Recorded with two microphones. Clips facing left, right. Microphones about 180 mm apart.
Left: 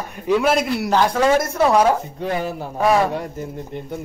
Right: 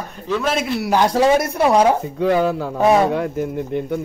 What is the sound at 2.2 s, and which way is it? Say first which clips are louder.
Speech: right 9 dB; 90° right.